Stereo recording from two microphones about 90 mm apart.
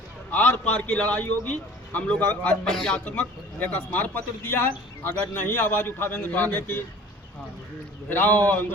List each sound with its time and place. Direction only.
0.3 s a man's voice: 15° left (ahead or behind)
8.1 s speech: 20° left (ahead or behind)